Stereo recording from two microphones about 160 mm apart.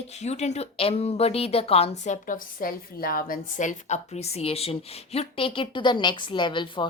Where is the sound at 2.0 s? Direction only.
55° left (ahead or behind).